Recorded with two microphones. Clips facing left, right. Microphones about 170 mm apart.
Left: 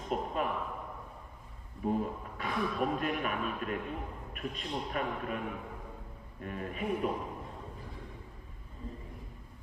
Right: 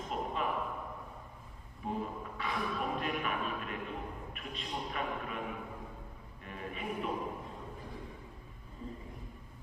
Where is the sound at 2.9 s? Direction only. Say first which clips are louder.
Left 2 dB; 45° left (ahead or behind).